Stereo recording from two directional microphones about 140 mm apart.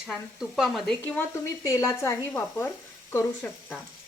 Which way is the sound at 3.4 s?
Centre (ahead or behind).